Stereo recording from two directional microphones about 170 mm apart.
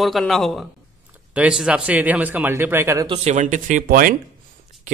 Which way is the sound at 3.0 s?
35° right (ahead or behind).